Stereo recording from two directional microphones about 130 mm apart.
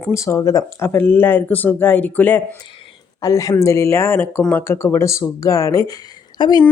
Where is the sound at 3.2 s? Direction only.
25° left (ahead or behind).